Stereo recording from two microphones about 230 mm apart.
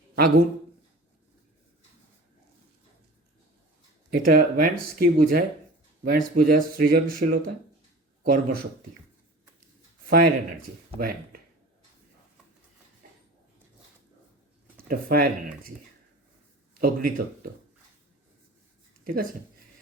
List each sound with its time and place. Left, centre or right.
4.1 s speech: right
10.1 s speech: right
14.8 s speech: right
16.7 s speech: right
19.0 s speech: right